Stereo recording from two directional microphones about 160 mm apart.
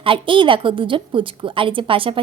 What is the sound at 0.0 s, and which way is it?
A woman's voice, 35° right (ahead or behind).